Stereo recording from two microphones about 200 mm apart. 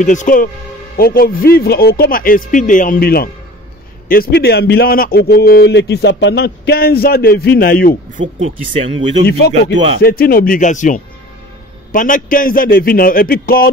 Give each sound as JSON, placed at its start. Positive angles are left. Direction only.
{"t": 0.0, "sound": "speech", "side_deg": 40}
{"t": 9.5, "sound": "speech", "side_deg": -35}
{"t": 10.0, "sound": "speech", "side_deg": 50}